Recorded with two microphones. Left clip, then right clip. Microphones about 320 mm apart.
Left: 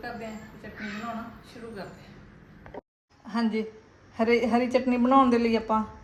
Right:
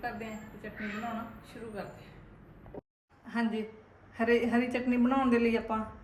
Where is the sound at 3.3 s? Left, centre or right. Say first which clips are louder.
Left 5 dB; left.